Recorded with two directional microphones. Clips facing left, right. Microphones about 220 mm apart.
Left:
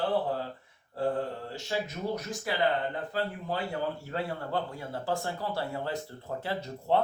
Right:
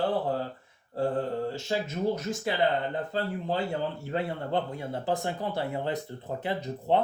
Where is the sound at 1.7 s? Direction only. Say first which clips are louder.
Right 2 dB; 25° right (ahead or behind).